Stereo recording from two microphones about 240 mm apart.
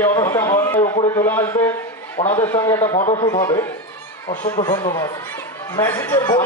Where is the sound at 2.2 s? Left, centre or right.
Left.